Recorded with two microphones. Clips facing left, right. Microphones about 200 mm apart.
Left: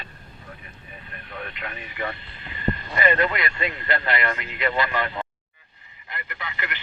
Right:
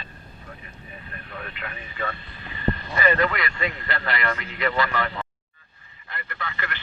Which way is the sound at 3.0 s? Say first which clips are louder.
Even; 20° left (ahead or behind).